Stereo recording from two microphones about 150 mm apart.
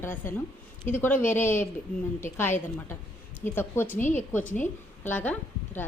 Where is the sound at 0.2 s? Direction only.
15° left (ahead or behind).